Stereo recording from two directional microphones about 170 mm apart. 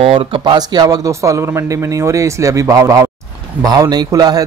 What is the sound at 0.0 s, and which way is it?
Speech, 35° right (ahead or behind).